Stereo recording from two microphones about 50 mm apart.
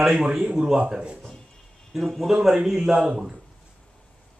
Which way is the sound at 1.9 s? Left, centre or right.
Centre.